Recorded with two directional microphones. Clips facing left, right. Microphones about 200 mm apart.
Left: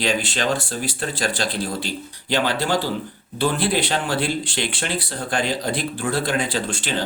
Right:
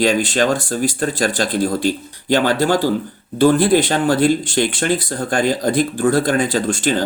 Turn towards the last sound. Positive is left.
turn(degrees=-45)  # may be behind; listen again after turning